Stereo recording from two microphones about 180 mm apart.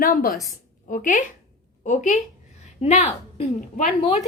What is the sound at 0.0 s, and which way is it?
Speech, 50° left (ahead or behind).